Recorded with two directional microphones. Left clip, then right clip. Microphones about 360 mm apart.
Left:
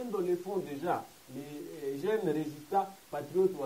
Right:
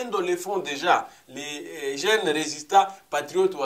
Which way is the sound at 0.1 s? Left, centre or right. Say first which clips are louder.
Right 6 dB; centre.